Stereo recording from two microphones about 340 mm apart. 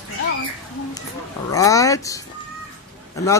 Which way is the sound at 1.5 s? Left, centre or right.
Centre.